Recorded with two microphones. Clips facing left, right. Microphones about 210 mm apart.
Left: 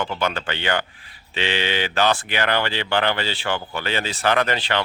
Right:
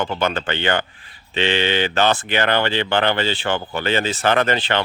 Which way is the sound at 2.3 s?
30° right (ahead or behind).